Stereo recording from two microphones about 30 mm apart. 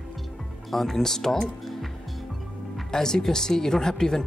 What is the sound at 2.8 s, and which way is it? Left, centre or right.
Speech, centre.